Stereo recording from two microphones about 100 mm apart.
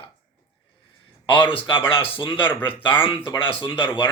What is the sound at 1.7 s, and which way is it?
Speech, 60° left (ahead or behind).